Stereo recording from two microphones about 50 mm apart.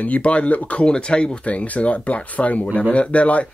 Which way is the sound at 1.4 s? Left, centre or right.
Left.